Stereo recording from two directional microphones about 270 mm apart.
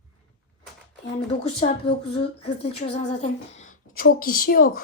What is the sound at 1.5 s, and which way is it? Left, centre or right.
A woman's voice, centre.